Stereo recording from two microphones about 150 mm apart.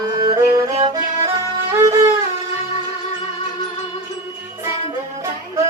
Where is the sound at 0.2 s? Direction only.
25° right (ahead or behind).